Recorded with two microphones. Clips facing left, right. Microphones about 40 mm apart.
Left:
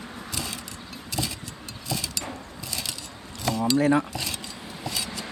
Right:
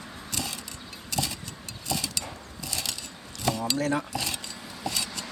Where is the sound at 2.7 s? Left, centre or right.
Centre.